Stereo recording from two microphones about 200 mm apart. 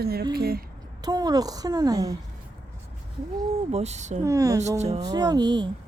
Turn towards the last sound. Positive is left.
turn(degrees=-20)  # may be behind; listen again after turning